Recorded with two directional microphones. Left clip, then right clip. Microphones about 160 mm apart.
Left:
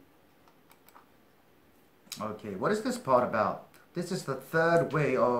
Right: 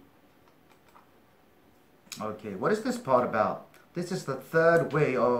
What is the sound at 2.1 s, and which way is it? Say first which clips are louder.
Speech: right 1 dB; 25° left (ahead or behind).